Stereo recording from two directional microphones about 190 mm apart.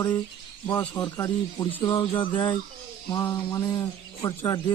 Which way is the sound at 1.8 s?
30° left (ahead or behind).